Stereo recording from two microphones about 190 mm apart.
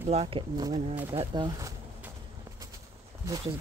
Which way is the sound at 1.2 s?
25° right (ahead or behind).